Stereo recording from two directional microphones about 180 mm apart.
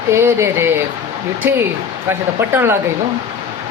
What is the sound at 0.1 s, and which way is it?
Speech, 15° right (ahead or behind).